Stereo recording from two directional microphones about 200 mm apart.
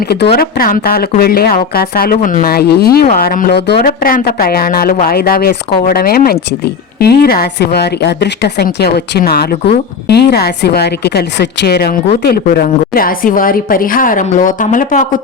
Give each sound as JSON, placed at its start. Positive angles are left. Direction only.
{"t": 0.0, "sound": "a woman's voice", "side_deg": 50}